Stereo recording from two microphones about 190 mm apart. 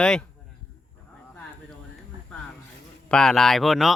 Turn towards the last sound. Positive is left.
turn(degrees=0)  # may be behind; listen again after turning